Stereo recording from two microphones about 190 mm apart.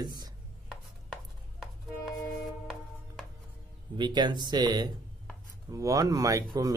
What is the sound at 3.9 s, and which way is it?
Speech, 25° right (ahead or behind).